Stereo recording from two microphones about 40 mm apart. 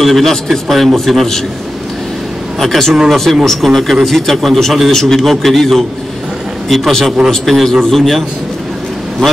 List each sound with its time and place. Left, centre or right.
0.0 s a man's voice: centre
2.6 s a man's voice: centre